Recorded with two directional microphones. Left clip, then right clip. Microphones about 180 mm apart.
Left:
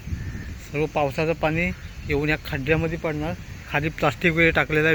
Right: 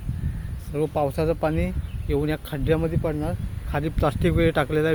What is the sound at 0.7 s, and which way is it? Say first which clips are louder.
Speech: left 1 dB; 5° right (ahead or behind).